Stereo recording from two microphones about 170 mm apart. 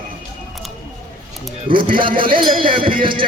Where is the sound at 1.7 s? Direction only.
30° right (ahead or behind).